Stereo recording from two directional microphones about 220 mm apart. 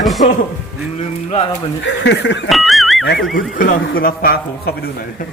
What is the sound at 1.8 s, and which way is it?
Speech, 55° left (ahead or behind).